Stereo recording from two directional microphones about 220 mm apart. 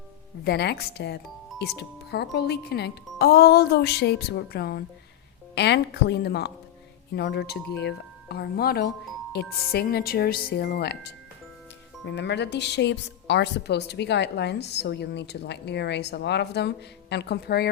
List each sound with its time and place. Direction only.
0.4 s a woman's voice: 50° left (ahead or behind)